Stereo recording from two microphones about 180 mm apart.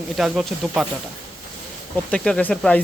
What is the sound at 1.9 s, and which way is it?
Speech, 5° left (ahead or behind).